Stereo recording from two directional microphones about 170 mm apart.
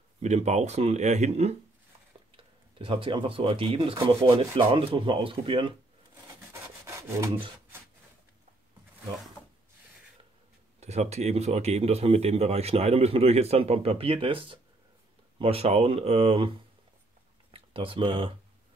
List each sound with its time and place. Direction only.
0.2 s speech: 40° right (ahead or behind)
6.9 s rub: 20° right (ahead or behind)
10.8 s speech: 40° right (ahead or behind)